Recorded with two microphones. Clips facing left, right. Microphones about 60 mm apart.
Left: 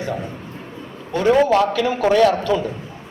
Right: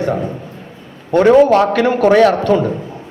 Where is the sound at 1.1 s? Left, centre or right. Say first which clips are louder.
Right 6 dB; right.